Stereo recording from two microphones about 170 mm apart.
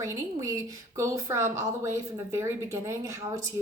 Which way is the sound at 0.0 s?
20° right (ahead or behind).